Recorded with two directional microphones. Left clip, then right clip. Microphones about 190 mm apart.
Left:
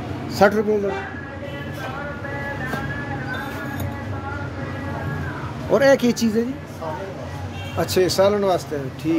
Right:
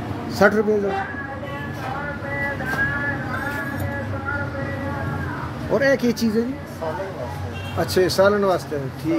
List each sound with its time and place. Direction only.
0.4 s speech: centre (ahead or behind)
5.7 s speech: 20° left (ahead or behind)
7.8 s speech: 5° left (ahead or behind)